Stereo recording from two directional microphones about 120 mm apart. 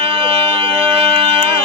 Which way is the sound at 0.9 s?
45° right (ahead or behind).